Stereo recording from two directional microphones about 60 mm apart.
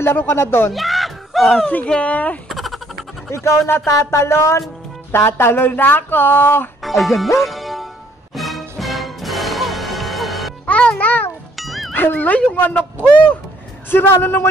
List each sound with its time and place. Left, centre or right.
0.0 s a sound: left
0.7 s a sound: centre
1.9 s speech: centre
2.5 s a sound: centre
3.3 s speech: left
3.6 s a sound: left
5.1 s speech: left
6.8 s speech: centre
7.3 s music: centre
10.7 s music: left
11.5 s music: centre
11.9 s speech: left
13.8 s a man's voice: left